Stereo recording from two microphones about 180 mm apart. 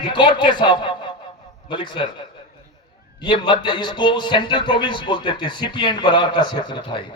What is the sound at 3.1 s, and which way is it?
A man's voice, 25° left (ahead or behind).